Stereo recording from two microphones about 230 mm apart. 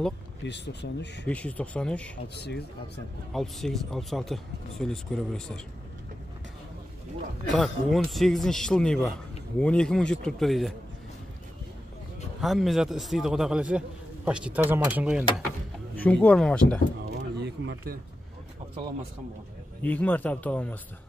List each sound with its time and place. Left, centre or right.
0.4 s speech: left
1.2 s a man's voice: centre
2.2 s speech: left
3.3 s a man's voice: centre
7.5 s a man's voice: centre
12.4 s a man's voice: centre
16.0 s a man's voice: centre
17.1 s a sound: right
19.8 s a man's voice: centre